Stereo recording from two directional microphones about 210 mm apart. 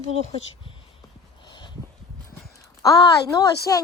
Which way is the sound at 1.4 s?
20° left (ahead or behind).